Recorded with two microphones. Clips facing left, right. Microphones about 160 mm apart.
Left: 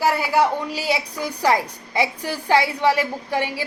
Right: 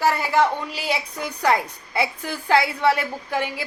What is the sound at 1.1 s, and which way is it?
Speech, 35° left (ahead or behind).